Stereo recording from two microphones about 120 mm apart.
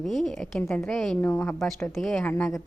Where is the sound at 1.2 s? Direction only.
20° left (ahead or behind).